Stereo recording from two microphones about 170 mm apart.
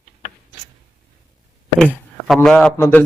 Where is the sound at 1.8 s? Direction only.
5° left (ahead or behind).